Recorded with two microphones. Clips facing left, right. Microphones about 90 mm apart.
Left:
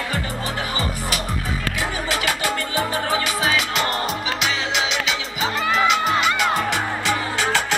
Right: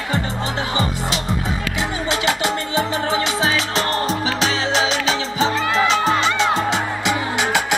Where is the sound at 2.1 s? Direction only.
25° right (ahead or behind).